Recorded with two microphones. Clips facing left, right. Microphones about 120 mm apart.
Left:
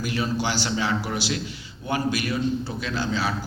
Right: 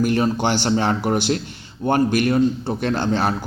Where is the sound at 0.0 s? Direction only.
50° right (ahead or behind).